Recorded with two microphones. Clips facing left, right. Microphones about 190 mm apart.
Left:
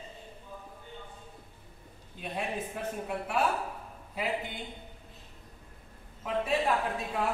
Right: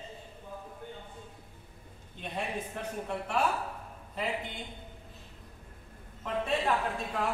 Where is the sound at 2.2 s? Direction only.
5° left (ahead or behind).